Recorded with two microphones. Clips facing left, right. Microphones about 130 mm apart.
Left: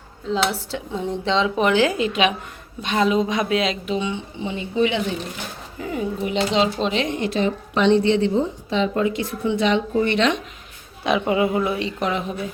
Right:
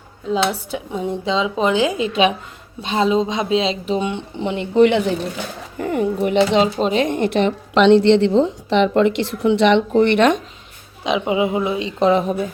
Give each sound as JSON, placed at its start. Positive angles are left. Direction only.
{"t": 0.3, "sound": "speech", "side_deg": -10}
{"t": 2.8, "sound": "speech", "side_deg": -30}
{"t": 4.1, "sound": "speech", "side_deg": -65}
{"t": 11.0, "sound": "speech", "side_deg": -15}
{"t": 12.2, "sound": "speech", "side_deg": -45}